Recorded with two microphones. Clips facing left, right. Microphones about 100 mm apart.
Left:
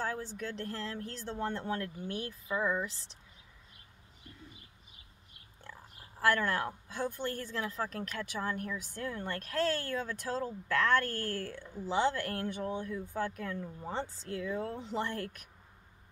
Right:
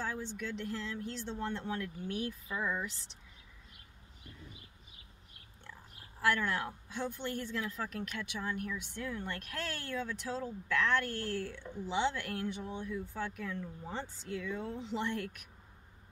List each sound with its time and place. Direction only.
0.0 s speech: 45° left (ahead or behind)
2.0 s speech: 30° left (ahead or behind)
6.1 s speech: 40° left (ahead or behind)